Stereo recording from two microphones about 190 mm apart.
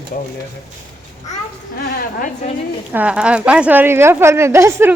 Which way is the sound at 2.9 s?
5° right (ahead or behind).